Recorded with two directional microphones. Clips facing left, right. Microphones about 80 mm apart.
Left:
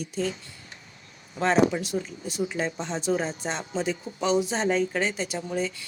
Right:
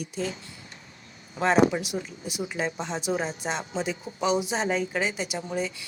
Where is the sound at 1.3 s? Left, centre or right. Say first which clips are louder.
Right 1 dB; centre.